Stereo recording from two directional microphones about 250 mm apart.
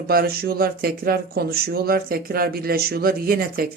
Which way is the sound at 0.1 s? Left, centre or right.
Right.